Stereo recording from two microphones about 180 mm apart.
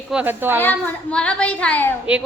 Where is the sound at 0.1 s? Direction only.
10° right (ahead or behind).